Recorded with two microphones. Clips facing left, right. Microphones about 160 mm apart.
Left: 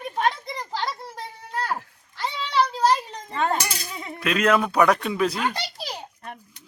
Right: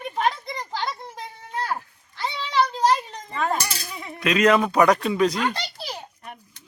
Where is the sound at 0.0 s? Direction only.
Centre (ahead or behind).